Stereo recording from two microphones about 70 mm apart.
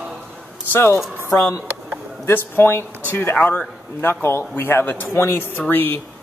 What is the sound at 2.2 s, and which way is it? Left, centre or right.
Speech, left.